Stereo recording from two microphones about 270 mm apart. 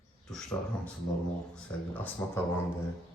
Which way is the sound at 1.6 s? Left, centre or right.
Centre.